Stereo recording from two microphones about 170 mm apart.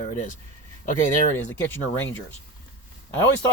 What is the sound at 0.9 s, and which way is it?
Speech, 50° left (ahead or behind).